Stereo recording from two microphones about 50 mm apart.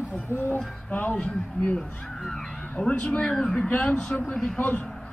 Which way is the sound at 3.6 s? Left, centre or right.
Left.